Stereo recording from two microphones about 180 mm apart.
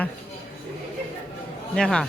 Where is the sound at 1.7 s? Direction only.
5° left (ahead or behind).